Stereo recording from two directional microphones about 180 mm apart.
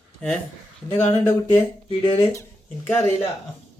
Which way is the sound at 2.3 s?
10° left (ahead or behind).